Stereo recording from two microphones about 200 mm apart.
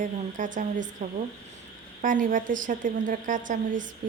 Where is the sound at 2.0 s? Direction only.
40° right (ahead or behind).